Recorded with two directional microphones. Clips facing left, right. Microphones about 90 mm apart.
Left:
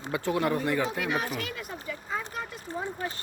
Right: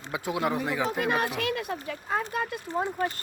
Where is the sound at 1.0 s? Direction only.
70° right (ahead or behind).